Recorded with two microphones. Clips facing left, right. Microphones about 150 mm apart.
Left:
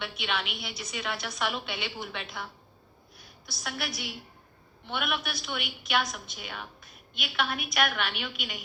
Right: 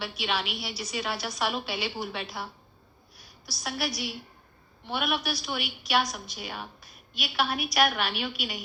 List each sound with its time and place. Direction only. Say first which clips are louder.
0.0 s a woman's voice: right 2 dB; 35° right (ahead or behind)
3.4 s a woman's voice: right 4 dB; 35° right (ahead or behind)